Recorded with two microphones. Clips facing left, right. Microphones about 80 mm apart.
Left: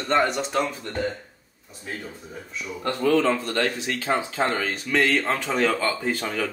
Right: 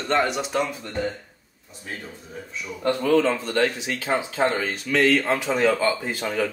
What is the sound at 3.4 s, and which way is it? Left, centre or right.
Speech, right.